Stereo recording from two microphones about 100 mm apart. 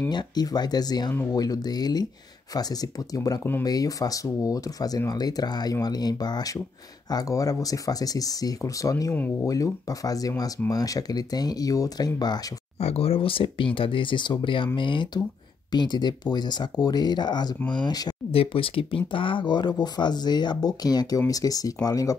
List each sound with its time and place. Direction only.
0.1 s speech: 45° left (ahead or behind)
9.1 s speech: 15° left (ahead or behind)
9.5 s speech: 35° left (ahead or behind)
12.7 s speech: 85° left; by 17.6 s 45° left (ahead or behind)
17.6 s speech: 10° left (ahead or behind)
17.8 s speech: 40° left (ahead or behind)
18.3 s speech: 65° left (ahead or behind); by 22.1 s 35° left (ahead or behind)